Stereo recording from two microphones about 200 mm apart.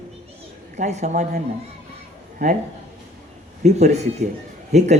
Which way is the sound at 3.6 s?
35° right (ahead or behind).